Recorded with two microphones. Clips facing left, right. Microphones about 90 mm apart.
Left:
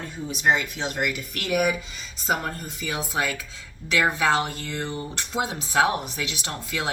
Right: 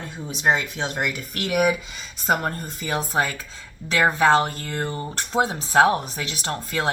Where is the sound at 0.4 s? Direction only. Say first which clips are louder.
Right 1 dB; 35° right (ahead or behind).